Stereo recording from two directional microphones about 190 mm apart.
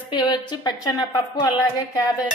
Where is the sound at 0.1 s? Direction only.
25° left (ahead or behind).